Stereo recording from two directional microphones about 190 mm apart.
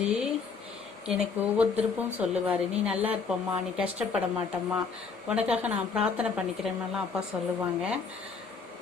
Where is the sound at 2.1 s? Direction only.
5° right (ahead or behind).